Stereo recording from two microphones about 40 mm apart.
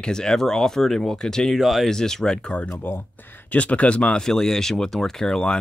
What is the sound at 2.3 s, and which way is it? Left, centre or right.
Speech, left.